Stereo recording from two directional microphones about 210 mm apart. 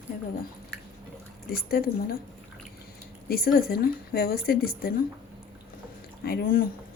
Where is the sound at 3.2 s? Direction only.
45° left (ahead or behind).